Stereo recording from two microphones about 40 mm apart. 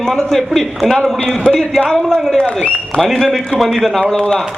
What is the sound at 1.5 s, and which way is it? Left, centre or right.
Speech, centre.